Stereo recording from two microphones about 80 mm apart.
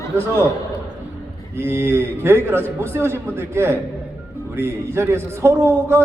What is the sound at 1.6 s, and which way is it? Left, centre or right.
A man's voice, right.